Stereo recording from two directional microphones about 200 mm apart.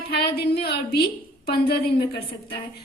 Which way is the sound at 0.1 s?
50° left (ahead or behind).